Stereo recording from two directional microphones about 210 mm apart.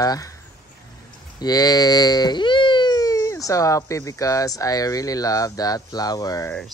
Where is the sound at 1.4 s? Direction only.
20° left (ahead or behind).